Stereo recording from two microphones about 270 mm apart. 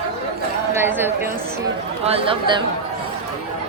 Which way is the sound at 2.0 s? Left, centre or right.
Right.